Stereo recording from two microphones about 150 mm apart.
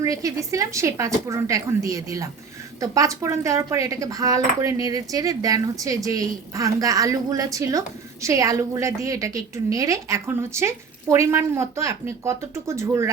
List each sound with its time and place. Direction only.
0.0 s speech: 25° right (ahead or behind)